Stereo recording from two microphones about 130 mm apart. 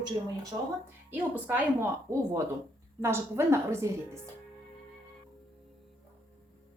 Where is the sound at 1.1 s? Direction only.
15° right (ahead or behind).